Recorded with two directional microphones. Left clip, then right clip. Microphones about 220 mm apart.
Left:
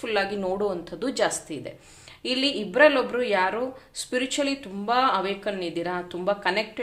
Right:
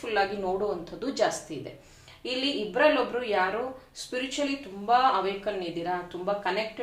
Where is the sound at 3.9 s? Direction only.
45° left (ahead or behind).